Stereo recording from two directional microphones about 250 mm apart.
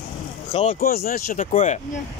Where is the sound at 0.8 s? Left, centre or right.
Left.